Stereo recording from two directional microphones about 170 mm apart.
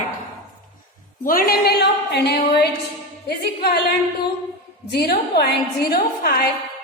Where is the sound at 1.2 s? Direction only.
55° left (ahead or behind).